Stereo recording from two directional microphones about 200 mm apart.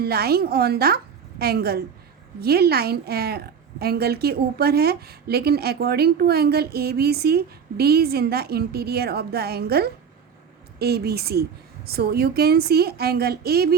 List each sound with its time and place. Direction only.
0.0 s a woman's voice: 50° right (ahead or behind)